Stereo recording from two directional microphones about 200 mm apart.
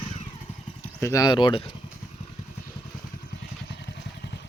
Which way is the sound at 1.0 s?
15° left (ahead or behind).